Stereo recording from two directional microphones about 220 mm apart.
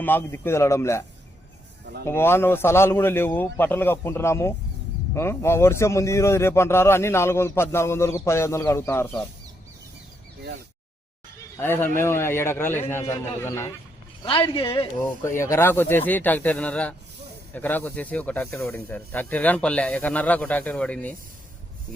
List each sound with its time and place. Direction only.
0.0 s a man's voice: 10° left (ahead or behind)
2.0 s a man's voice: 10° left (ahead or behind)
11.5 s a man's voice: 10° left (ahead or behind)
14.3 s a man's voice: 25° left (ahead or behind)
15.4 s a man's voice: 10° left (ahead or behind)